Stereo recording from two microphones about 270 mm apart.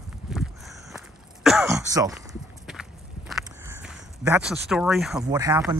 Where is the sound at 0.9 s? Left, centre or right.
Centre.